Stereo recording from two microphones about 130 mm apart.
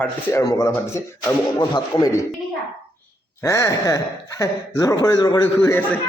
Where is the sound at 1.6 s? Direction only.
35° left (ahead or behind).